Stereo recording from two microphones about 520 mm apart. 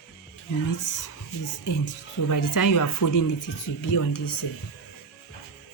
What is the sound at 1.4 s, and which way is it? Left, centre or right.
A woman's voice, left.